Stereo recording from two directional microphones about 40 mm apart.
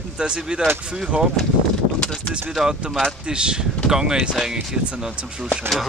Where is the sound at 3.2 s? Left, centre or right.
Right.